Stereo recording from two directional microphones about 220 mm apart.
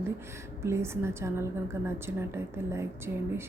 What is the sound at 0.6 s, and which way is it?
A woman's voice, 10° right (ahead or behind).